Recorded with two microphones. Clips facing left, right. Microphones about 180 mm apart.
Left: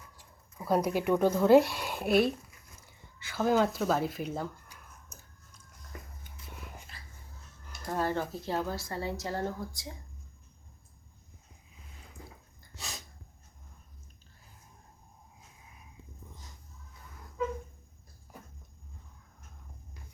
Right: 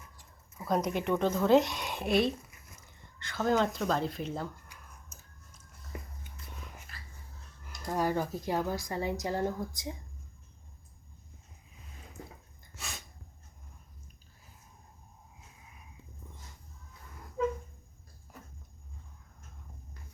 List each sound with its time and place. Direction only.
0.2 s speech: 10° left (ahead or behind)
7.6 s a woman's voice: 10° right (ahead or behind)